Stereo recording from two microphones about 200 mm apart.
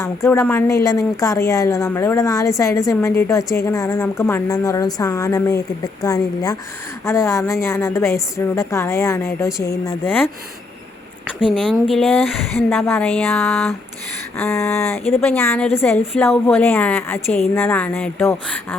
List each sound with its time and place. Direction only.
0.0 s speech: 15° left (ahead or behind)
11.5 s a woman's voice: centre (ahead or behind)
14.3 s a woman's voice: 15° left (ahead or behind)